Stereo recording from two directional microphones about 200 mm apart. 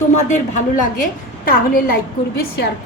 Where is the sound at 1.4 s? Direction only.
45° left (ahead or behind).